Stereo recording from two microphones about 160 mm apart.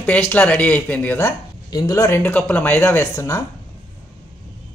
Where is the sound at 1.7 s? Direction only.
25° left (ahead or behind).